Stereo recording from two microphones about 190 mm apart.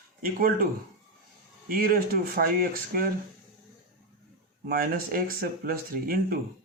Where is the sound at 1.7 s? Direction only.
50° right (ahead or behind).